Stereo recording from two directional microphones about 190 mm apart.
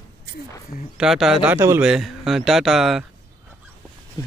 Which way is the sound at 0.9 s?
5° right (ahead or behind).